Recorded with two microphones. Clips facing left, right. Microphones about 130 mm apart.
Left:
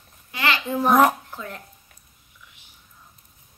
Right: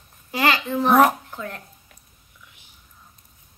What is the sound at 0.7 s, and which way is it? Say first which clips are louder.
Speech: even; 10° left (ahead or behind).